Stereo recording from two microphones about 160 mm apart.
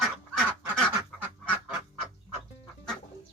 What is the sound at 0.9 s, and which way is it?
Goose, 5° right (ahead or behind).